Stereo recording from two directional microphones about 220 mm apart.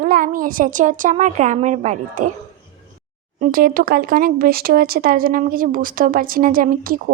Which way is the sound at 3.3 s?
40° right (ahead or behind).